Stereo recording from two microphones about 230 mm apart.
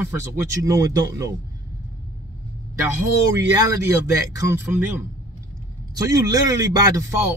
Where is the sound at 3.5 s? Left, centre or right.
Centre.